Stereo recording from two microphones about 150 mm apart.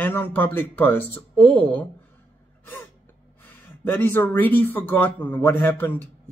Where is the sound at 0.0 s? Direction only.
15° left (ahead or behind).